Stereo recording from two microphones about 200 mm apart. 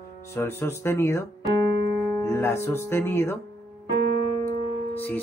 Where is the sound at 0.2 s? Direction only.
15° left (ahead or behind).